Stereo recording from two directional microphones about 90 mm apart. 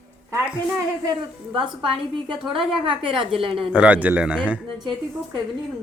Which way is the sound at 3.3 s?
85° right.